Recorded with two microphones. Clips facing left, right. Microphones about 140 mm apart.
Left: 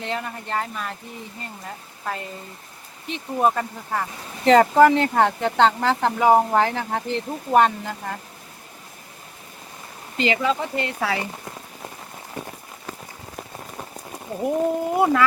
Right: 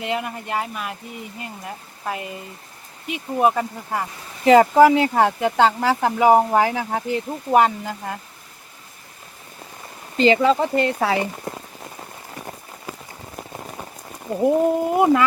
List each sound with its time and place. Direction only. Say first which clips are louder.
0.0 s speech: right 3 dB; 15° right (ahead or behind)
10.2 s speech: right 6 dB; 35° right (ahead or behind)
14.4 s speech: right 4 dB; 20° right (ahead or behind)